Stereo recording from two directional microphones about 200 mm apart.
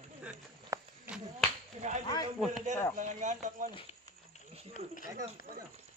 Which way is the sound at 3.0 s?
35° right (ahead or behind).